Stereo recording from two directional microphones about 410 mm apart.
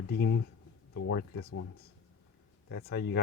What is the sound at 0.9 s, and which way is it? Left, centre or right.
Speech, left.